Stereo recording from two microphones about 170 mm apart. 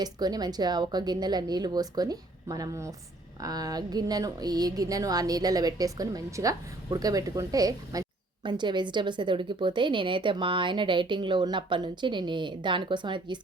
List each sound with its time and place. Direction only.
0.0 s a woman's voice: 25° right (ahead or behind)